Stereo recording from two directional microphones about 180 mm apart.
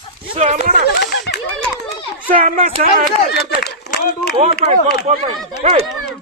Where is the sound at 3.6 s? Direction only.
65° left (ahead or behind).